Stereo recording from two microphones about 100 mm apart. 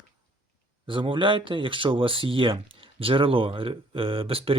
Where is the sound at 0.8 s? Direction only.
60° right (ahead or behind).